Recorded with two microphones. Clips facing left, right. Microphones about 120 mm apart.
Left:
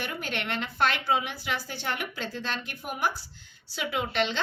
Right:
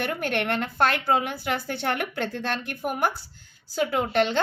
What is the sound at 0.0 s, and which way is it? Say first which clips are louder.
A woman's voice: right 7 dB; 55° right (ahead or behind).